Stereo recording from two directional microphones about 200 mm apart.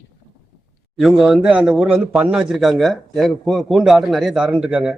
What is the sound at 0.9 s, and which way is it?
A man's voice, centre (ahead or behind).